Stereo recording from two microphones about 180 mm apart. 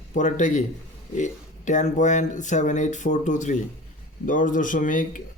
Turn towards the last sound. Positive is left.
turn(degrees=45)  # may be behind; listen again after turning